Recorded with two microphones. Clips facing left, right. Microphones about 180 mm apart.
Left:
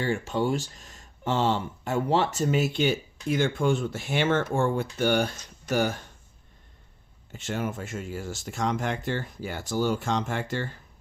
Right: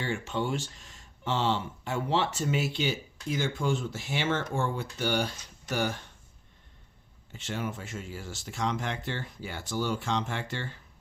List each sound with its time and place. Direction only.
0.0 s speech: 40° left (ahead or behind)
7.3 s speech: 50° left (ahead or behind)